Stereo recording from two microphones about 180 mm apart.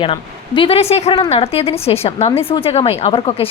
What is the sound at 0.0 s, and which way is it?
A woman's voice, 30° left (ahead or behind).